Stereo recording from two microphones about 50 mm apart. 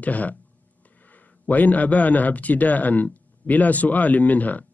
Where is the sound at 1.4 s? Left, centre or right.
Left.